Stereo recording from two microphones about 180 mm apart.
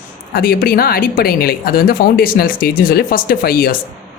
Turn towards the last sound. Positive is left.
turn(degrees=55)  # may be behind; listen again after turning